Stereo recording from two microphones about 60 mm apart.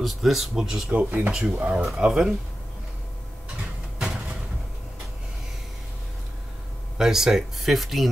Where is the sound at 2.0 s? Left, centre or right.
Centre.